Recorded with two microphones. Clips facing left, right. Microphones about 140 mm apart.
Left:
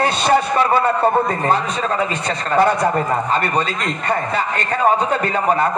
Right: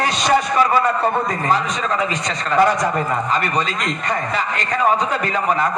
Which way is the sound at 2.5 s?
35° left (ahead or behind).